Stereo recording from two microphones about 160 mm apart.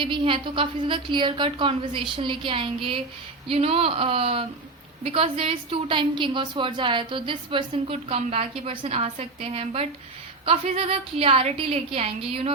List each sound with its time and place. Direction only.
0.0 s a woman's voice: 30° right (ahead or behind)